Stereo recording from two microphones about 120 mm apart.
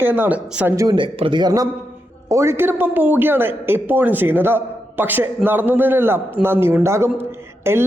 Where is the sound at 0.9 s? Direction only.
45° right (ahead or behind).